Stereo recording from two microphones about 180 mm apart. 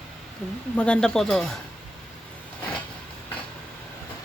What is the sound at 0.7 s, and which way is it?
Speech, 5° left (ahead or behind).